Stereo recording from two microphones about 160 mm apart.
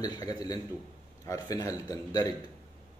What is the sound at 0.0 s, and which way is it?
Speech, 25° left (ahead or behind).